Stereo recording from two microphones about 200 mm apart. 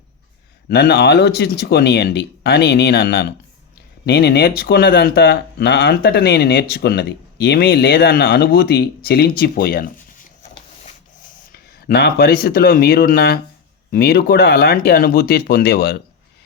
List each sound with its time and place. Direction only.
0.7 s speech: 50° left (ahead or behind)
11.8 s speech: 50° left (ahead or behind)